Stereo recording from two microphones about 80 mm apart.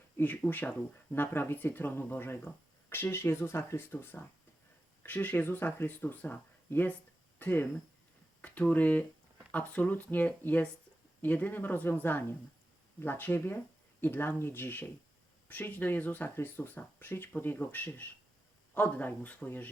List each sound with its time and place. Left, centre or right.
0.2 s speech: left
7.3 s a sound: left
8.4 s speech: centre